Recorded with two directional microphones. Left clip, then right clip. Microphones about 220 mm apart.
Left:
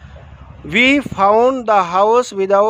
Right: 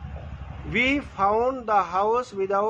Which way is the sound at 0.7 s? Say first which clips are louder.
Left 10 dB; 50° left (ahead or behind).